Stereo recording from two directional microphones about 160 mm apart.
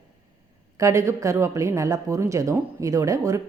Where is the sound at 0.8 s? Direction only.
20° right (ahead or behind).